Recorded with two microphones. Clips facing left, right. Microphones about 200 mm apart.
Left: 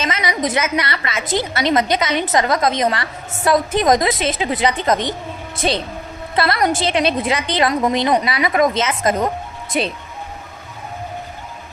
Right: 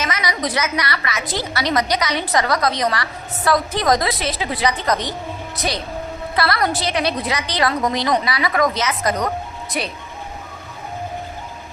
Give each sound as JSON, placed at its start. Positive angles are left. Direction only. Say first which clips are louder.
{"t": 0.0, "sound": "a woman's voice", "louder": "left 2 dB", "side_deg": 25}